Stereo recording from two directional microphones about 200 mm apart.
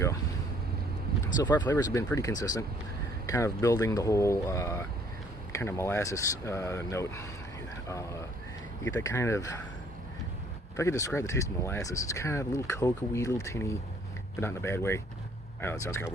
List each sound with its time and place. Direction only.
1.1 s vehicle: 50° right (ahead or behind)
1.6 s speech: 15° left (ahead or behind)
10.8 s speech: 15° left (ahead or behind)